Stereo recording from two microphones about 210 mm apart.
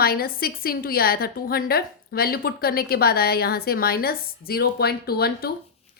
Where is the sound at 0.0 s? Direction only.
45° left (ahead or behind).